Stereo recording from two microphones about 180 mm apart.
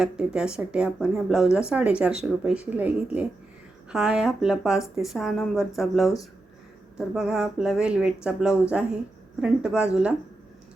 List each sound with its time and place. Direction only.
0.0 s speech: 5° right (ahead or behind)